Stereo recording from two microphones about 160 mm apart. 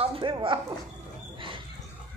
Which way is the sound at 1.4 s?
30° right (ahead or behind).